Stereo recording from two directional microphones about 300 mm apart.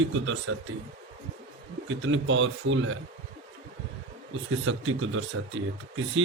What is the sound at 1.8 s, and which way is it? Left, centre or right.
Speech, right.